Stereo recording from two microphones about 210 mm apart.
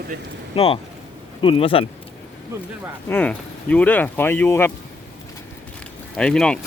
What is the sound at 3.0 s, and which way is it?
Speech, 10° left (ahead or behind).